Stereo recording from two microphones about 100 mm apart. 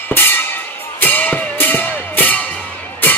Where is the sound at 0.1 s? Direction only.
20° left (ahead or behind).